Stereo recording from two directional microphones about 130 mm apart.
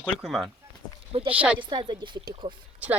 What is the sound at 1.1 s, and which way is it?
Speech, 45° right (ahead or behind).